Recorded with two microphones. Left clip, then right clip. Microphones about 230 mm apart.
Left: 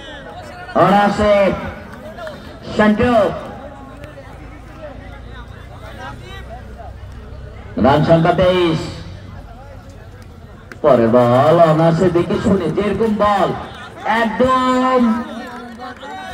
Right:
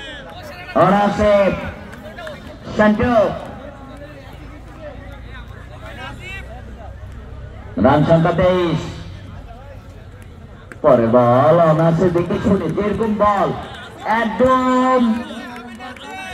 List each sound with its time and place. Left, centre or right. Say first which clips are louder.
0.7 s a man's voice: left 2 dB; left
2.7 s a man's voice: left 1 dB; left
7.7 s a man's voice: left 1 dB; left
10.8 s a man's voice: left 1 dB; left